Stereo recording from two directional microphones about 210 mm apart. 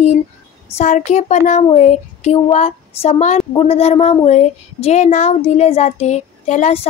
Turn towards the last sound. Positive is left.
turn(degrees=30)  # may be behind; listen again after turning